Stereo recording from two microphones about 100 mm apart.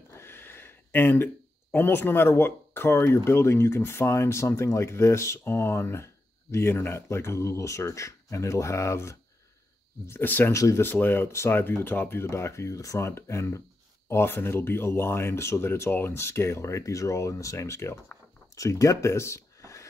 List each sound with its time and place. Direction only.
0.2 s a sound: 25° left (ahead or behind)
3.3 s speech: 25° left (ahead or behind)
10.5 s speech: 30° left (ahead or behind)
10.9 s speech: 20° left (ahead or behind)